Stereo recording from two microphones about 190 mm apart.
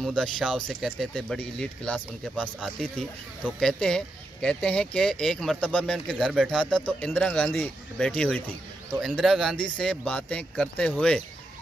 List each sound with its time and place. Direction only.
0.0 s speech: 5° left (ahead or behind)